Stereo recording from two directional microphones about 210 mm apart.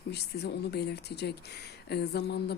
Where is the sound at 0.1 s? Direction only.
50° left (ahead or behind).